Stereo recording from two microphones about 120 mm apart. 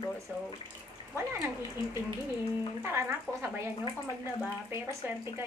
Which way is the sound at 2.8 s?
20° right (ahead or behind).